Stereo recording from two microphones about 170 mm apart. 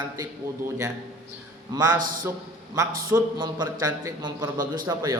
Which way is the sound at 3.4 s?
25° right (ahead or behind).